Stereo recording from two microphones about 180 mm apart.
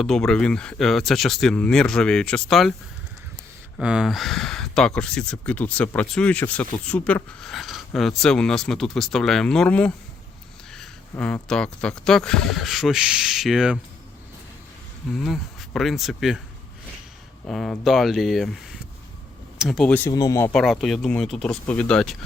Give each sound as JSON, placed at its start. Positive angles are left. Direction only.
{"t": 0.0, "sound": "speech", "side_deg": 5}
{"t": 3.8, "sound": "speech", "side_deg": -5}
{"t": 11.1, "sound": "speech", "side_deg": 5}
{"t": 15.1, "sound": "speech", "side_deg": 0}
{"t": 17.4, "sound": "speech", "side_deg": 0}
{"t": 20.5, "sound": "speech", "side_deg": 5}